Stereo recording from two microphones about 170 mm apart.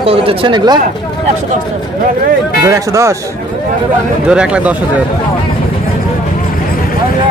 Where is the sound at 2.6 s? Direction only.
15° right (ahead or behind).